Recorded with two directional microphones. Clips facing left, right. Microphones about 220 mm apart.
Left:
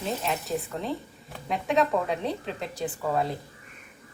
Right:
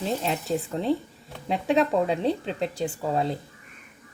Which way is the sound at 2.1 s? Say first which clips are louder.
Right 4 dB; 30° right (ahead or behind).